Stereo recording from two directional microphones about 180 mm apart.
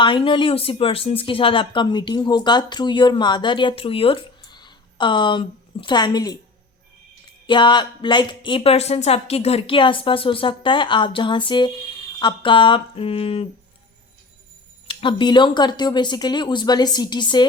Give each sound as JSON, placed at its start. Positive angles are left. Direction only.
{"t": 0.0, "sound": "speech", "side_deg": 25}
{"t": 7.4, "sound": "speech", "side_deg": 25}
{"t": 14.8, "sound": "speech", "side_deg": 25}